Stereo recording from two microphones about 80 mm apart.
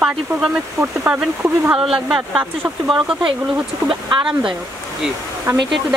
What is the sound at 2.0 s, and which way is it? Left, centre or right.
Speech, centre.